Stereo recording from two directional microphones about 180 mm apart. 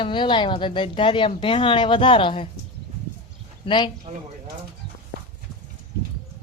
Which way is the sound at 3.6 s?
30° left (ahead or behind).